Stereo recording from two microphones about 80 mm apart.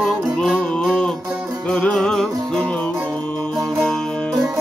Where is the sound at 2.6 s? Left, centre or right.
Centre.